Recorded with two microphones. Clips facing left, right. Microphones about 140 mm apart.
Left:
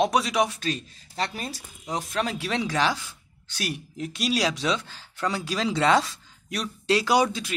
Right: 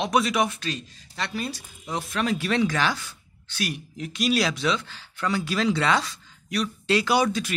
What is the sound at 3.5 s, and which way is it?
Speech, 35° left (ahead or behind).